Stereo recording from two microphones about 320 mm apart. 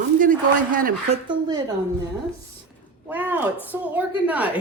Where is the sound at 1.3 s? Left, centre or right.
Centre.